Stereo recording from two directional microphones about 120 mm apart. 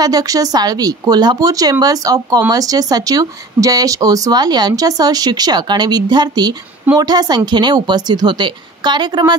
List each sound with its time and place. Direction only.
0.0 s speech: 30° right (ahead or behind)